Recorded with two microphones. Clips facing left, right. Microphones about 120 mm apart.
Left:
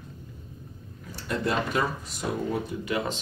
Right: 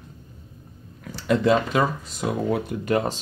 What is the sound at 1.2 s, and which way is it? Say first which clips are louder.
Speech: right 8 dB; 90° right.